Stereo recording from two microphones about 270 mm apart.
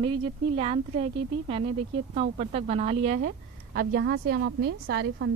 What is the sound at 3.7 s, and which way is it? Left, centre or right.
A woman's voice, right.